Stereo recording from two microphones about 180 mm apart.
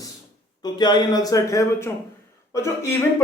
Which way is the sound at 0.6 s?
25° left (ahead or behind).